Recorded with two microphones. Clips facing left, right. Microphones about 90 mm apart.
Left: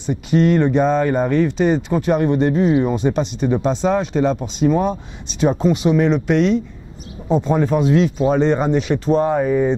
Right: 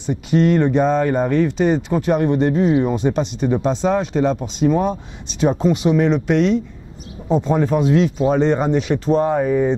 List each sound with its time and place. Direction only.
0.3 s speech: 15° left (ahead or behind)